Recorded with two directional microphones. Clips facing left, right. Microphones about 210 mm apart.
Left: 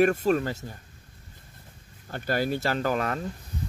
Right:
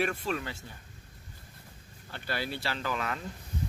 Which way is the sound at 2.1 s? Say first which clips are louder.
Left 8 dB; 45° left (ahead or behind).